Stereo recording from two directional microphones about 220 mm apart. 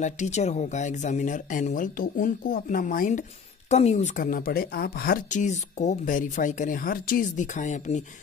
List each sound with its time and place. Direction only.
0.0 s speech: 30° left (ahead or behind)